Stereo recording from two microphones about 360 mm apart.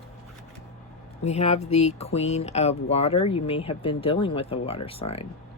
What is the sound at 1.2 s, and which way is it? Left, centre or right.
Speech, centre.